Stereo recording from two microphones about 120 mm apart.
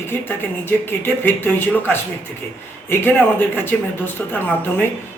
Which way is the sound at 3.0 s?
15° left (ahead or behind).